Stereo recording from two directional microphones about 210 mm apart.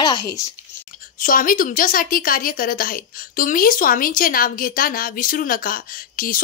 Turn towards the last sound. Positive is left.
turn(degrees=40)  # may be behind; listen again after turning